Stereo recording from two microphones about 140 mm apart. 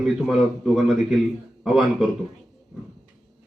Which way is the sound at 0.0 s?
5° right (ahead or behind).